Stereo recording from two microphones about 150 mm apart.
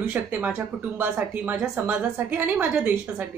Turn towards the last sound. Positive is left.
turn(degrees=-10)  # may be behind; listen again after turning